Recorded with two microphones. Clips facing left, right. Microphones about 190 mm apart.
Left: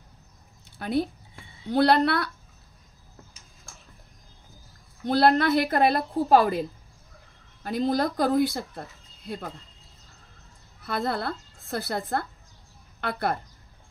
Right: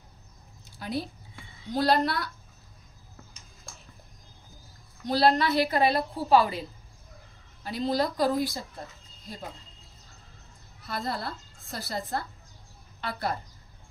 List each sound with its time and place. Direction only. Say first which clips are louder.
0.7 s a sound: left 6 dB; 60° left (ahead or behind)
1.7 s a woman's voice: left 4 dB; 65° left (ahead or behind)
5.0 s speech: left 3 dB; 55° left (ahead or behind)
10.8 s a woman's voice: left 5 dB; 60° left (ahead or behind)